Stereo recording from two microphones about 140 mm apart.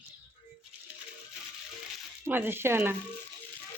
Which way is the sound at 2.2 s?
15° right (ahead or behind).